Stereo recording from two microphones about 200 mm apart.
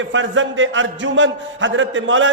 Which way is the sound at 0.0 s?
70° right (ahead or behind).